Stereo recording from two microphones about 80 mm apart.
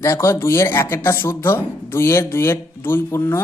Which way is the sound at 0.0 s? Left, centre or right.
Left.